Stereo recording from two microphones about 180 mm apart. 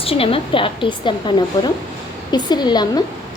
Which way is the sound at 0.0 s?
30° left (ahead or behind).